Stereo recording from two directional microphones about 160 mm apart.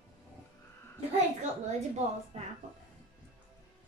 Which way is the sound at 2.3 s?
40° right (ahead or behind).